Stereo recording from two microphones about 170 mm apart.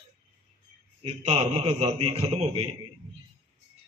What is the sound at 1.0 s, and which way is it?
A man's voice, 40° right (ahead or behind).